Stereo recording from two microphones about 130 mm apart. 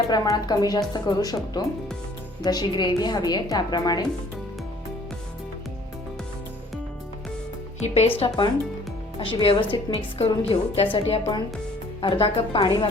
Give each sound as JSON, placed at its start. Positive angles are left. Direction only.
{"t": 0.1, "sound": "a woman's voice", "side_deg": 30}
{"t": 7.8, "sound": "speech", "side_deg": 55}
{"t": 9.1, "sound": "a woman's voice", "side_deg": 40}